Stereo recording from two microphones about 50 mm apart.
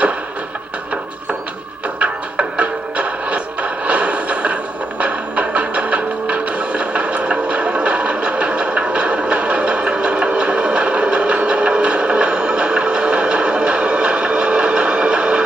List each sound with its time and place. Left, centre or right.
2.0 s music: right
3.8 s a sound: right
5.0 s music: right